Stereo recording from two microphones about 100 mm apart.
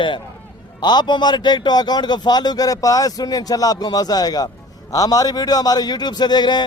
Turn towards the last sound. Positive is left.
turn(degrees=45)  # may be behind; listen again after turning